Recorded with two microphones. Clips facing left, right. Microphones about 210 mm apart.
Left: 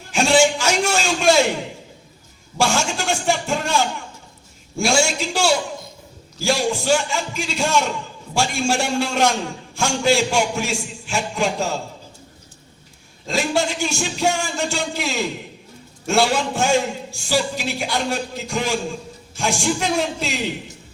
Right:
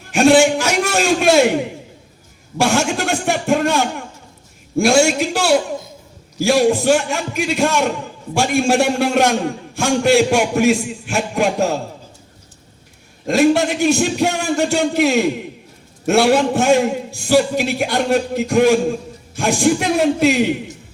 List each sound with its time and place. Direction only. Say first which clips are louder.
0.1 s a sound: right 5 dB; 60° right (ahead or behind)
2.6 s a man's voice: right 4 dB; 60° right (ahead or behind)
13.2 s a man's voice: right 8 dB; 55° right (ahead or behind)